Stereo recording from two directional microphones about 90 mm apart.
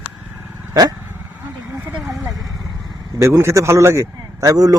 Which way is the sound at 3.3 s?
30° right (ahead or behind).